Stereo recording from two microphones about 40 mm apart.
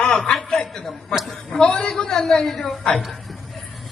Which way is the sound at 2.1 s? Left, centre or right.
Centre.